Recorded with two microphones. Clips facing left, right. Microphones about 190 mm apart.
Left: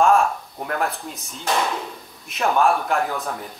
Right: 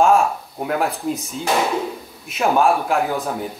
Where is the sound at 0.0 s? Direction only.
Centre (ahead or behind).